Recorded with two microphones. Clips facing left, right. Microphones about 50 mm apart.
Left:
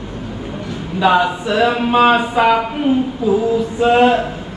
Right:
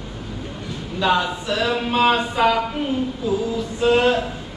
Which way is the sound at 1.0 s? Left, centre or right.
Centre.